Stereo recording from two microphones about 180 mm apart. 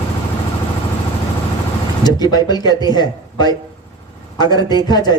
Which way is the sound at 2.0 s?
20° left (ahead or behind).